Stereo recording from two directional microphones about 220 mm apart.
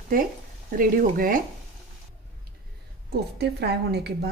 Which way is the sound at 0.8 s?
40° right (ahead or behind).